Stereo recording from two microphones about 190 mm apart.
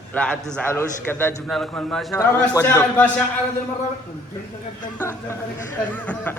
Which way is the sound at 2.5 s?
20° left (ahead or behind).